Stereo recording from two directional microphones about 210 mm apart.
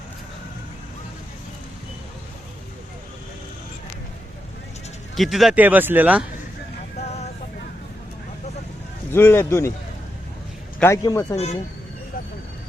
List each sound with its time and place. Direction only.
5.1 s speech: centre (ahead or behind)
9.1 s speech: 10° left (ahead or behind)
10.8 s speech: 15° left (ahead or behind)